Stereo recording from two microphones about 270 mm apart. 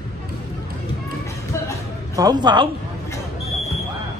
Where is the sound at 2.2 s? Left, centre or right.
Centre.